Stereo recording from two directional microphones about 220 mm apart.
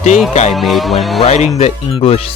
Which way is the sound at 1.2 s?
30° left (ahead or behind).